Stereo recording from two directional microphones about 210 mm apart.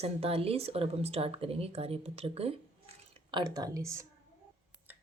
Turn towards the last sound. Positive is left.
turn(degrees=-15)  # may be behind; listen again after turning